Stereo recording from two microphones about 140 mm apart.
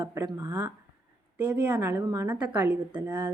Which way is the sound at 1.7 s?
20° right (ahead or behind).